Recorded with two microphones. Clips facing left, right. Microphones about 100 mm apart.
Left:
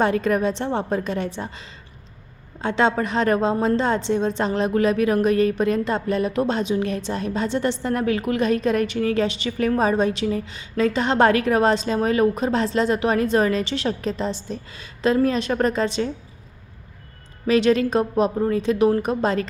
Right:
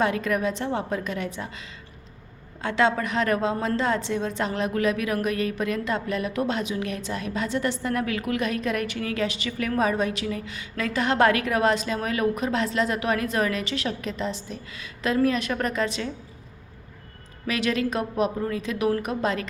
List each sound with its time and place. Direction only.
0.0 s a woman's voice: 35° left (ahead or behind)
17.4 s a woman's voice: 30° left (ahead or behind)